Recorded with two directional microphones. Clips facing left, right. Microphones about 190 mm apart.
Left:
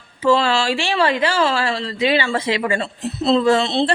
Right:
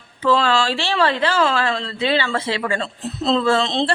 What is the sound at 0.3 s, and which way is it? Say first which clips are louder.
A woman's voice: left 1 dB; 10° left (ahead or behind).